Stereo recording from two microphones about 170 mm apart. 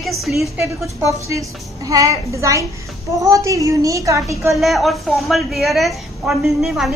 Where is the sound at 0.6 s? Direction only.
15° right (ahead or behind).